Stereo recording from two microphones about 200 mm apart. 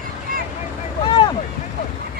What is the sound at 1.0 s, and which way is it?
Boat, 25° left (ahead or behind).